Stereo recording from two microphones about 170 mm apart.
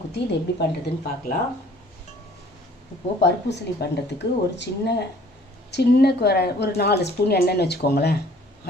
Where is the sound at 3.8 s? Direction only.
70° left (ahead or behind).